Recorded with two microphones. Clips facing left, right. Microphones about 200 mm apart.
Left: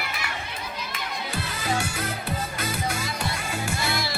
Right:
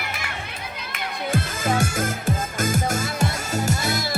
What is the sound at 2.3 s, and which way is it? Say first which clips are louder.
Music: right 6 dB; 45° right (ahead or behind).